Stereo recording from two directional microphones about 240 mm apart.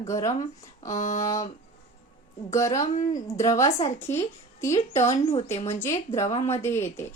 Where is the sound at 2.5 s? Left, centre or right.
Centre.